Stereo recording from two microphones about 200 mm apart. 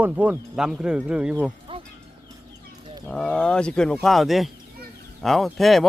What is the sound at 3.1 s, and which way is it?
Speech, 5° left (ahead or behind).